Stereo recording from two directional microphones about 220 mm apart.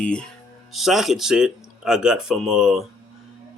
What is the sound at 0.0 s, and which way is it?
Speech, 5° left (ahead or behind).